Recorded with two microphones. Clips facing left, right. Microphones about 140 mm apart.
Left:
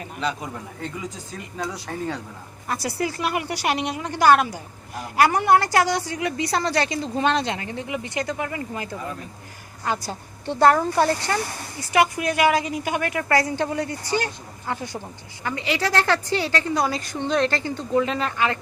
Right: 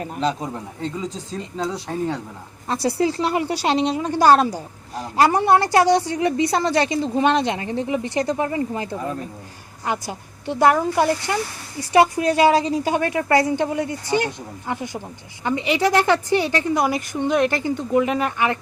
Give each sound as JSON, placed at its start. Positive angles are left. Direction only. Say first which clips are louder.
{"t": 0.0, "sound": "a man's voice", "louder": "right 5 dB", "side_deg": -35}
{"t": 9.8, "sound": "a woman's voice", "louder": "right 1 dB", "side_deg": -15}
{"t": 11.8, "sound": "a woman's voice", "louder": "right 4 dB", "side_deg": -30}